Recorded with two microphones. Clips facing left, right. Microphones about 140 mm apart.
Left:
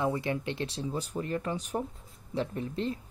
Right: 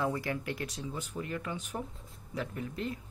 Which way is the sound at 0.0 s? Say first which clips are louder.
Left 3 dB; 20° left (ahead or behind).